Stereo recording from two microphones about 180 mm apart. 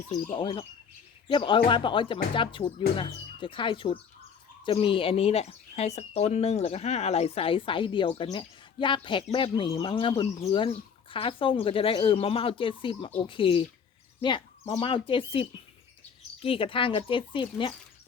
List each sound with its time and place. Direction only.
0.3 s speech: 30° left (ahead or behind)